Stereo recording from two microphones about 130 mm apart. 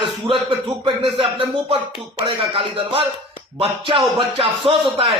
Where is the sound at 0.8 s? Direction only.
45° right (ahead or behind).